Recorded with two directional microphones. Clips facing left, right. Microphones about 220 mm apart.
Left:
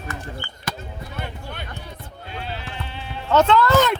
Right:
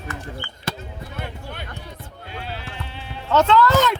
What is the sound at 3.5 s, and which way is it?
Speech, 55° left (ahead or behind).